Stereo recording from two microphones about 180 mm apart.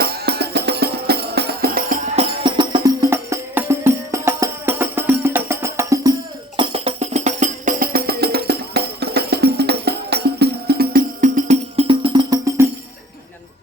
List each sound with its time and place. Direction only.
0.0 s music: 65° right (ahead or behind)
2.1 s music: 25° right (ahead or behind)
6.6 s music: 30° right (ahead or behind)
11.9 s music: 25° right (ahead or behind)